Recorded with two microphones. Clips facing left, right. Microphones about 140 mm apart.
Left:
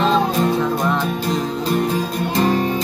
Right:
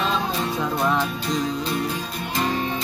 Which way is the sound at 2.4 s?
40° left (ahead or behind).